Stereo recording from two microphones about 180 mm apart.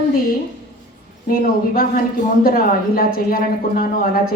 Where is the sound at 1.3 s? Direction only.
55° left (ahead or behind).